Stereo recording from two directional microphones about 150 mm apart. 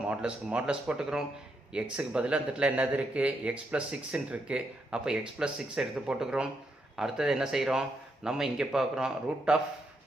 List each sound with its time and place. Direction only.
0.1 s a man's voice: 5° right (ahead or behind)